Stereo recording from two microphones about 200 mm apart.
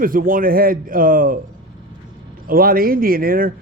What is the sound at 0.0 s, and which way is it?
Speech, 45° right (ahead or behind).